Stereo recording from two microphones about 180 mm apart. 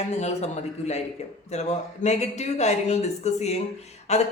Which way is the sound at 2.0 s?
40° left (ahead or behind).